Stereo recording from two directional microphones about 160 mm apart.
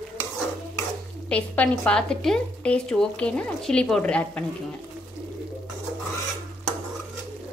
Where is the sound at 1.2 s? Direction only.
10° left (ahead or behind).